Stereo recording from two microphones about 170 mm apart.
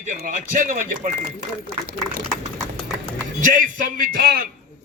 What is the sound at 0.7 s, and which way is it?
Speech, 55° right (ahead or behind).